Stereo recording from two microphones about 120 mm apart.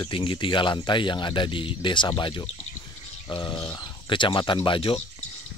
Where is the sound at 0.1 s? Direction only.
45° left (ahead or behind).